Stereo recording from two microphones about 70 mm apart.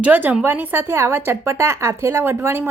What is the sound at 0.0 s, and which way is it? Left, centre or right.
A woman's voice, right.